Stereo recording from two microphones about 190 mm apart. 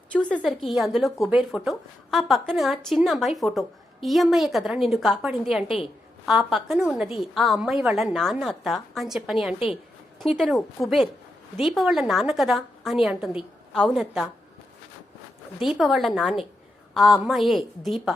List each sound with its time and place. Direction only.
0.1 s a woman's voice: 5° left (ahead or behind)
5.6 s a woman's voice: 30° left (ahead or behind)
6.2 s a woman's voice: centre (ahead or behind)
15.6 s a woman's voice: centre (ahead or behind)